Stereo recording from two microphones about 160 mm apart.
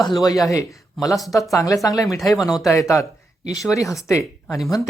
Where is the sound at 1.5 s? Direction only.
20° left (ahead or behind).